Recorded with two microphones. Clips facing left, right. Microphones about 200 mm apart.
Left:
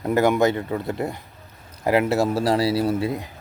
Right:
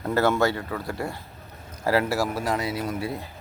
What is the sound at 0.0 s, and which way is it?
A man's voice, 15° left (ahead or behind).